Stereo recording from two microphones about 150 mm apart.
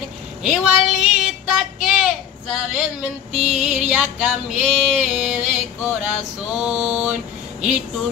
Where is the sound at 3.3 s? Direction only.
45° right (ahead or behind).